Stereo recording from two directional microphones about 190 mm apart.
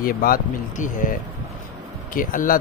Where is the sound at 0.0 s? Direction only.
50° left (ahead or behind).